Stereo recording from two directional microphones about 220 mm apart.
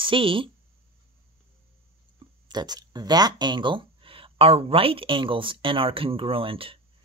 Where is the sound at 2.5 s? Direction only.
20° right (ahead or behind).